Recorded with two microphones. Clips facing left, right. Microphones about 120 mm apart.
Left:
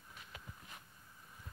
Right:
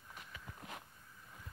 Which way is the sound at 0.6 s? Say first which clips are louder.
Right 7 dB; 70° right (ahead or behind).